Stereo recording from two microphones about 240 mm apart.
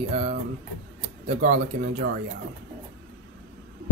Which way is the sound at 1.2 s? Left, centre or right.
Right.